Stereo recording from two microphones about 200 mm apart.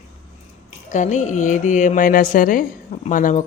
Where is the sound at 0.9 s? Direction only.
40° left (ahead or behind).